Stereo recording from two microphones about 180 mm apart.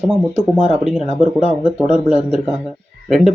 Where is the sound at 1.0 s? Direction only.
35° left (ahead or behind).